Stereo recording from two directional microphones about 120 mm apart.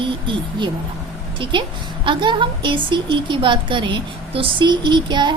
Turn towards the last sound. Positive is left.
turn(degrees=-40)  # may be behind; listen again after turning